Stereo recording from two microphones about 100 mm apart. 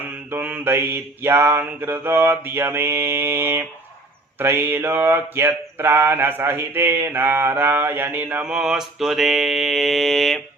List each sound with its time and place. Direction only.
0.3 s mantra: 20° right (ahead or behind); by 10.4 s centre (ahead or behind)